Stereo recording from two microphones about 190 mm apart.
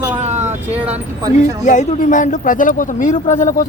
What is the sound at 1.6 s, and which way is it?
A man's voice, 40° left (ahead or behind).